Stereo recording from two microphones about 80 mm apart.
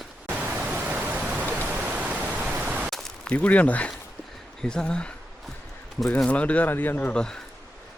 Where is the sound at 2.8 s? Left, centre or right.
Centre.